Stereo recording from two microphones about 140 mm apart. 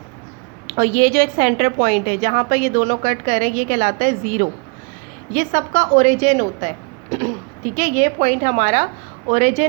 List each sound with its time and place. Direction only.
0.7 s a woman's voice: 65° right (ahead or behind)